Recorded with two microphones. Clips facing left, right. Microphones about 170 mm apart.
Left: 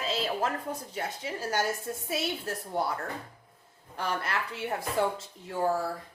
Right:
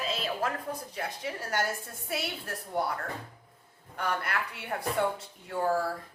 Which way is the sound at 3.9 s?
25° left (ahead or behind).